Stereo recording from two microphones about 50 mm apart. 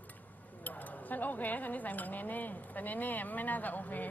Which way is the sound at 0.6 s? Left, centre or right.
Left.